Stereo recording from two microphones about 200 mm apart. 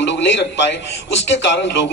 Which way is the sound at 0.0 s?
60° left (ahead or behind).